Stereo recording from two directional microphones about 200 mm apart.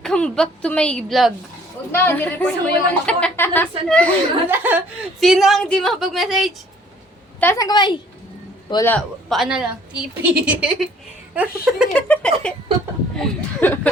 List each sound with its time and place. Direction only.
0.0 s a woman's voice: 5° left (ahead or behind)
4.4 s a woman's voice: 10° right (ahead or behind)
7.3 s a woman's voice: 10° left (ahead or behind)
9.3 s a woman's voice: centre (ahead or behind)
11.9 s a woman's voice: 5° left (ahead or behind)